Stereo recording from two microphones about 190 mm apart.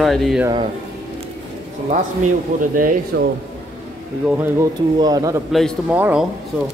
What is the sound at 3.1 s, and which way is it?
Speech, 60° right (ahead or behind).